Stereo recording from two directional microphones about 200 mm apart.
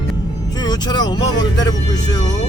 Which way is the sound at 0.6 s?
20° left (ahead or behind).